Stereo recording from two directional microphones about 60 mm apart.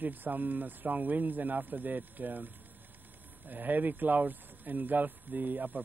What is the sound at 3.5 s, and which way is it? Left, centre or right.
Speech, right.